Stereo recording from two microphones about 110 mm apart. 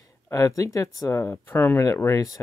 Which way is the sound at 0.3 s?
30° left (ahead or behind).